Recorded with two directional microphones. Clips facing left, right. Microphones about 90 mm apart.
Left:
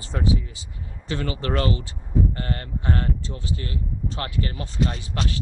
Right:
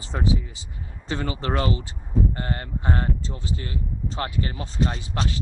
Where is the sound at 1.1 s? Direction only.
25° right (ahead or behind).